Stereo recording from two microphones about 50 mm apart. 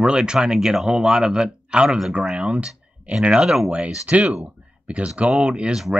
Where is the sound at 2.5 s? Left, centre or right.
Right.